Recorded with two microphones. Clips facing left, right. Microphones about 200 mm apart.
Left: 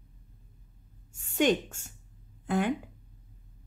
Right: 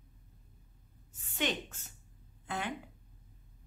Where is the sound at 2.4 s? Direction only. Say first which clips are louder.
Left 10 dB; 45° left (ahead or behind).